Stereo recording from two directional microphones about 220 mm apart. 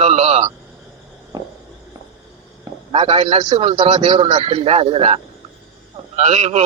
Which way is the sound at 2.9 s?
25° right (ahead or behind).